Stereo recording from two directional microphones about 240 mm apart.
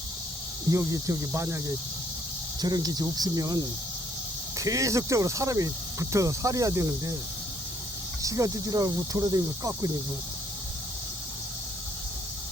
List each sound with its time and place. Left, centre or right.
0.7 s speech: centre
8.2 s speech: centre